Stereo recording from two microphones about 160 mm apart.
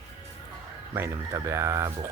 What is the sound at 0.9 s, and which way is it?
Speech, 15° right (ahead or behind).